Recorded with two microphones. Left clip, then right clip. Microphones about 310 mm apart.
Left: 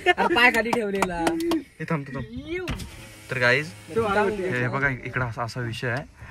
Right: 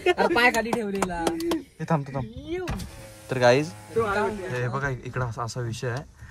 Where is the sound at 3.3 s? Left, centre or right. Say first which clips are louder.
Right 2 dB; centre.